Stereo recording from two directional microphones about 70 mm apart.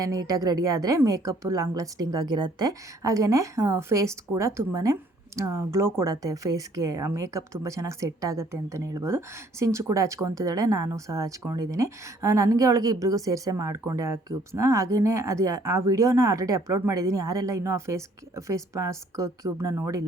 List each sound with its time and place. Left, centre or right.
0.0 s a woman's voice: right
19.5 s speech: right